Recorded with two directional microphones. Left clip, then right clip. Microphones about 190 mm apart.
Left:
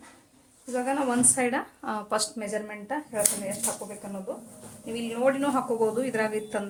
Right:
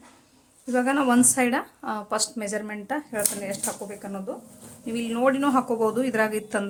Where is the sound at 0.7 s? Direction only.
40° right (ahead or behind).